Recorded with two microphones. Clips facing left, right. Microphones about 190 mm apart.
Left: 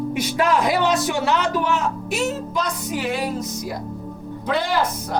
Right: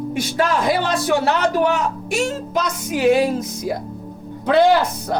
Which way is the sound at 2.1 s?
90° right.